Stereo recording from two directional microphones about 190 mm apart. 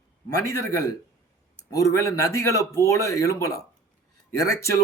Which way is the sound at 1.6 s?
15° left (ahead or behind).